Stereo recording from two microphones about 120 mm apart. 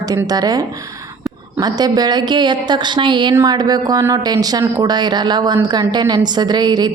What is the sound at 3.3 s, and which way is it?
A woman's voice, 30° right (ahead or behind).